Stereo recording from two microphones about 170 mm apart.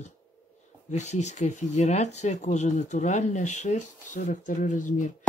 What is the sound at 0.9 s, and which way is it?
Speech, 40° left (ahead or behind).